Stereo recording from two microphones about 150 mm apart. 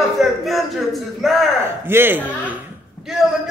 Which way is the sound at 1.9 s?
15° right (ahead or behind).